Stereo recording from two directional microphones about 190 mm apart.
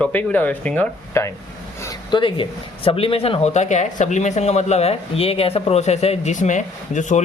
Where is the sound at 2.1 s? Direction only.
25° left (ahead or behind).